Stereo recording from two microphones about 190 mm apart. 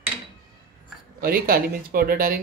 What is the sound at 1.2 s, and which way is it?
Speech, 50° right (ahead or behind).